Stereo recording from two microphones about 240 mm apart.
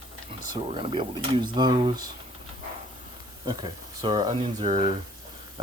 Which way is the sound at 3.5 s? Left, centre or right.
Centre.